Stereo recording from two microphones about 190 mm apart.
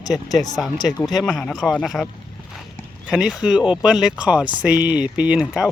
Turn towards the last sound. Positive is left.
turn(degrees=5)  # may be behind; listen again after turning